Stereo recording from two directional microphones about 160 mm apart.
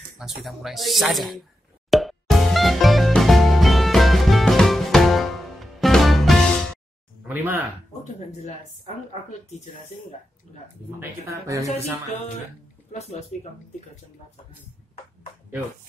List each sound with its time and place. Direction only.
0.2 s speech: centre (ahead or behind)
1.9 s music: centre (ahead or behind)
7.2 s speech: 15° right (ahead or behind)
8.0 s speech: 45° left (ahead or behind)
11.0 s speech: 20° right (ahead or behind)